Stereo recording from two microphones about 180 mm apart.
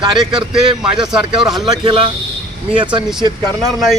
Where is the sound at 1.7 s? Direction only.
25° right (ahead or behind).